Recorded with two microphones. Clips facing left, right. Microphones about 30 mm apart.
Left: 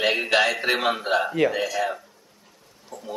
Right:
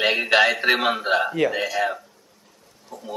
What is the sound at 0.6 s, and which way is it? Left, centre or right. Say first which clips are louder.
Speech: right 3 dB; centre.